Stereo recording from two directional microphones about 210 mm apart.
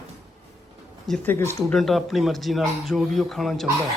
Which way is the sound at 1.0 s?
5° left (ahead or behind).